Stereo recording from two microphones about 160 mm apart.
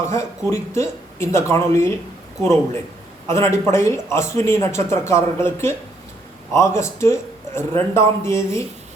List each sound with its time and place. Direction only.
0.0 s speech: 15° left (ahead or behind)